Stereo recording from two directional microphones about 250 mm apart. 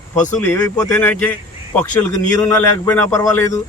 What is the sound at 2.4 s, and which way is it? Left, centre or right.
Speech, centre.